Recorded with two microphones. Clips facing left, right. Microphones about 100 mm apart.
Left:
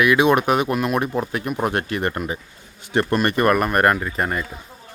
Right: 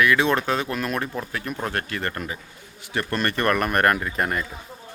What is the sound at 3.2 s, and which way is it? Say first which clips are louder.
Speech: left 1 dB; 10° left (ahead or behind).